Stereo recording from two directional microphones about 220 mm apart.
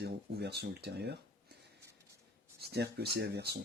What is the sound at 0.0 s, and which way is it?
Speech, 45° right (ahead or behind).